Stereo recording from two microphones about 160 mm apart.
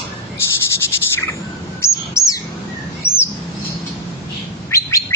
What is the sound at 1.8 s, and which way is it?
Chirp, 20° left (ahead or behind).